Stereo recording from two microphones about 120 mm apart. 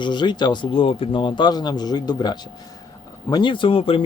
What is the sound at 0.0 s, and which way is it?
Speech, 40° left (ahead or behind).